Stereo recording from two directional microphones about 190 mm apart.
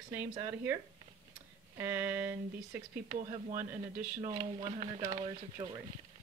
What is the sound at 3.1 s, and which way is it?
Speech, 35° right (ahead or behind).